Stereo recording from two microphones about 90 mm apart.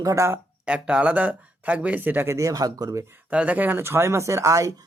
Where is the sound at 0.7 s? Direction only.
15° right (ahead or behind); by 3.0 s 40° right (ahead or behind).